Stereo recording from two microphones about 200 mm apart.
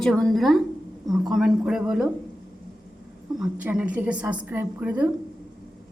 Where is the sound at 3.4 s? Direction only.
5° right (ahead or behind).